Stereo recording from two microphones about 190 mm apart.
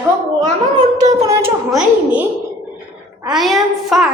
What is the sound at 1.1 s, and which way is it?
A woman's voice, 15° right (ahead or behind).